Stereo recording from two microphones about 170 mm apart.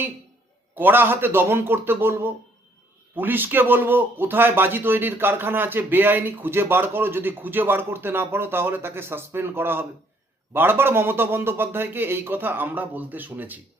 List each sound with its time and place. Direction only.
0.8 s a man's voice: 10° right (ahead or behind)